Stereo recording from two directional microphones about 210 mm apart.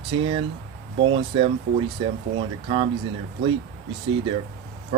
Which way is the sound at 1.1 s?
25° right (ahead or behind).